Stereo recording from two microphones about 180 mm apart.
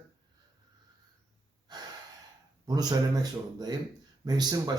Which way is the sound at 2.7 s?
20° right (ahead or behind).